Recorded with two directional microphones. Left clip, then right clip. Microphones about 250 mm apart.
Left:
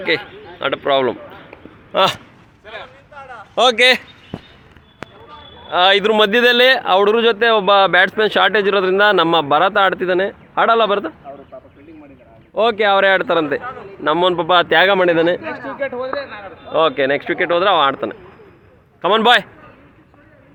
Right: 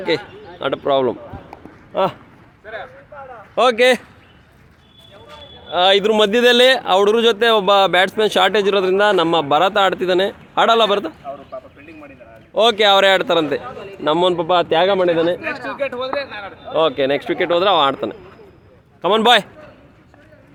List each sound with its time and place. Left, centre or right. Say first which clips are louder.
0.1 s speech: left 1 dB; centre
1.9 s speech: left 4 dB; centre
3.5 s a man's voice: left 1 dB; centre
5.7 s speech: left 1 dB; centre
11.5 s a sound: right 5 dB; centre
12.5 s a man's voice: right 1 dB; centre
16.7 s speech: left 1 dB; centre